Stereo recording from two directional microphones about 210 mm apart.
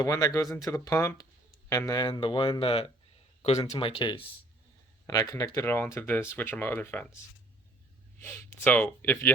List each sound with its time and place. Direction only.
0.0 s speech: 15° left (ahead or behind)
8.2 s speech: 10° left (ahead or behind)